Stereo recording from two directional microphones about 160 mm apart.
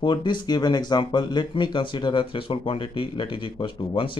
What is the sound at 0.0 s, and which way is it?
Speech, 30° left (ahead or behind).